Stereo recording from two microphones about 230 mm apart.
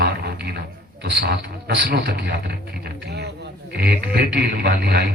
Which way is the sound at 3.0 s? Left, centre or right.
Right.